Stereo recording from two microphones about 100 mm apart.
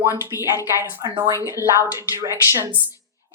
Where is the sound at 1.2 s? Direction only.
35° left (ahead or behind).